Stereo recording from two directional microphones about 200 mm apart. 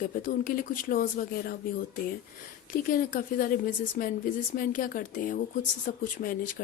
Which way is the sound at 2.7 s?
45° left (ahead or behind).